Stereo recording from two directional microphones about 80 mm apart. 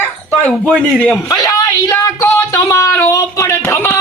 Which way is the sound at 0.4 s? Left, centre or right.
Centre.